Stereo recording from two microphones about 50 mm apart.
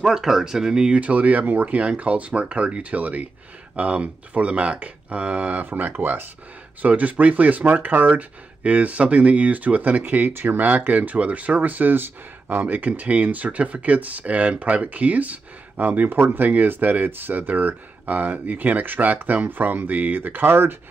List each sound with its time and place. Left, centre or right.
0.0 s speech: centre; by 20.7 s right